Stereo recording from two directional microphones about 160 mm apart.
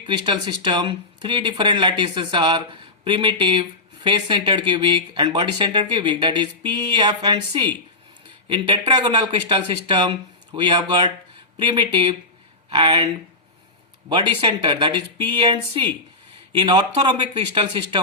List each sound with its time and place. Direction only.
0.0 s speech: 30° right (ahead or behind)
14.1 s speech: 30° right (ahead or behind)